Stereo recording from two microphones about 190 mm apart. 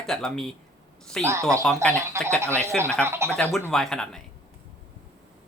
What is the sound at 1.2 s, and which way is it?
Speech, 15° right (ahead or behind).